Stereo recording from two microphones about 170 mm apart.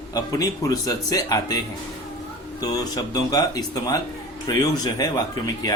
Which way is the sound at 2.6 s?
20° left (ahead or behind).